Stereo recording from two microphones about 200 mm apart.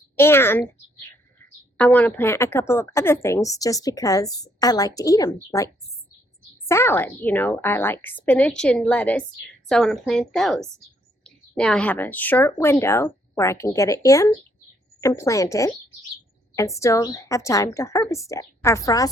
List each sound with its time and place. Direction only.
0.2 s a child's voice: 10° left (ahead or behind)
6.7 s a woman's voice: 10° left (ahead or behind)